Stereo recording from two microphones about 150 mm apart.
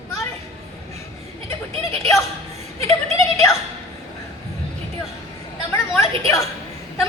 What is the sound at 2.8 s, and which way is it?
Speech, 40° right (ahead or behind).